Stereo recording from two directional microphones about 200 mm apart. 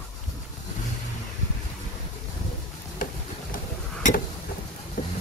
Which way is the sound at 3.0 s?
45° left (ahead or behind).